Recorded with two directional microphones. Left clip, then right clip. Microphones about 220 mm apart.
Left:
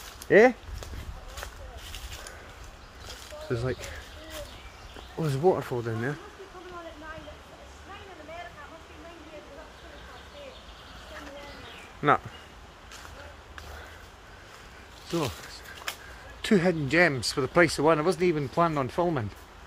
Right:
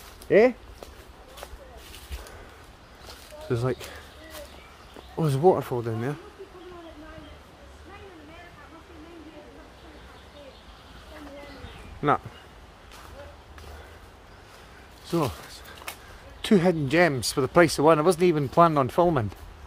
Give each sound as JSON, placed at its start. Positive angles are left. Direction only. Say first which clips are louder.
{"t": 0.3, "sound": "speech", "louder": "even", "side_deg": 5}
{"t": 3.4, "sound": "speech", "louder": "right 3 dB", "side_deg": -20}
{"t": 5.1, "sound": "speech", "louder": "right 4 dB", "side_deg": -20}
{"t": 12.0, "sound": "speech", "louder": "left 1 dB", "side_deg": -10}
{"t": 15.0, "sound": "a sound", "louder": "right 3 dB", "side_deg": -20}
{"t": 16.3, "sound": "speech", "louder": "right 3 dB", "side_deg": -15}